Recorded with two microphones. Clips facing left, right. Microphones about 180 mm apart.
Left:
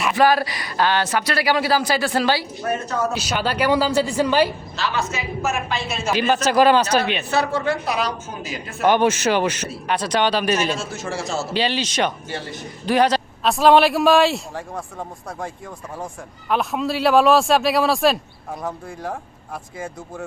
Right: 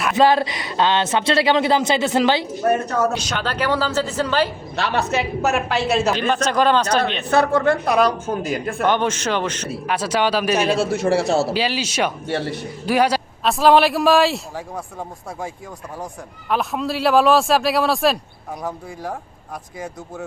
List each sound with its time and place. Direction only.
0.2 s speech: 25° right (ahead or behind)
3.2 s speech: 10° left (ahead or behind)
4.8 s a woman's voice: 65° right (ahead or behind)
6.1 s speech: 5° left (ahead or behind)
7.3 s a woman's voice: 50° right (ahead or behind)
8.8 s speech: 10° left (ahead or behind)
9.8 s a man's voice: 5° right (ahead or behind)
10.8 s a woman's voice: 60° right (ahead or behind)
11.5 s speech: 5° right (ahead or behind)
12.3 s a man's voice: 65° right (ahead or behind)
12.8 s a man's voice: 10° right (ahead or behind)
16.5 s a man's voice: centre (ahead or behind)